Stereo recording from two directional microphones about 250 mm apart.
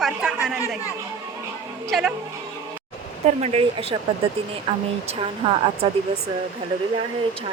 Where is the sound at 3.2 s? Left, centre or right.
Right.